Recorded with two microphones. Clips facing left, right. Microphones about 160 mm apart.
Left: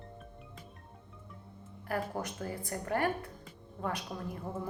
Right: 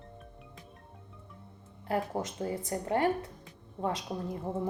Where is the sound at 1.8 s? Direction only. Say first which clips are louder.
Right 3 dB; 25° right (ahead or behind).